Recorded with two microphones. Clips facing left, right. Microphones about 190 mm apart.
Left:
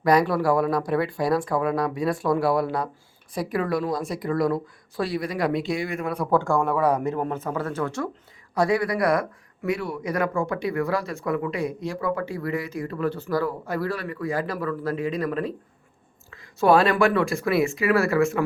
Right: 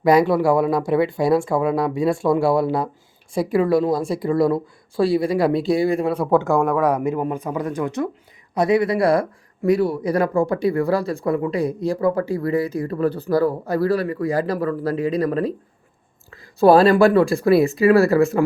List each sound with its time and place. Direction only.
0.0 s speech: 25° right (ahead or behind)
6.6 s speech: 10° right (ahead or behind); by 18.4 s 35° right (ahead or behind)